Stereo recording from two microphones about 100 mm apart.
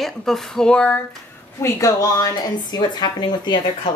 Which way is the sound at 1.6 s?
30° left (ahead or behind).